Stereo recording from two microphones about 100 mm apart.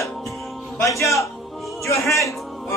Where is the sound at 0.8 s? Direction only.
30° left (ahead or behind).